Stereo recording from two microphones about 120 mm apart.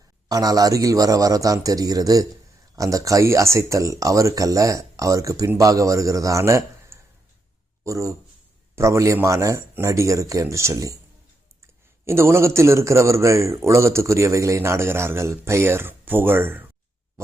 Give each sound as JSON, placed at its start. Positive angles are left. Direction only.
{"t": 0.3, "sound": "a man's voice", "side_deg": -30}
{"t": 12.0, "sound": "a man's voice", "side_deg": -20}